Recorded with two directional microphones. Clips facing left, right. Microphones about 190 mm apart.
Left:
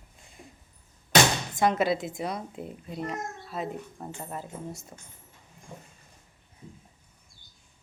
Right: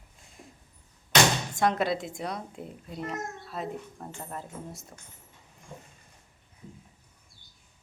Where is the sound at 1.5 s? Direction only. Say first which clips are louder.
Left 3 dB; centre (ahead or behind).